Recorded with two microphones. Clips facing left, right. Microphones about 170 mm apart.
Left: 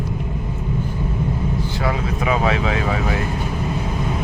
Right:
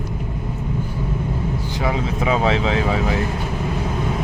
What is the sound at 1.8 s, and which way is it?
Vehicle, 20° right (ahead or behind).